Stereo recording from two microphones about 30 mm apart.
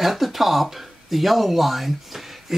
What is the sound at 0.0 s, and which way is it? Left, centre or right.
Speech, centre.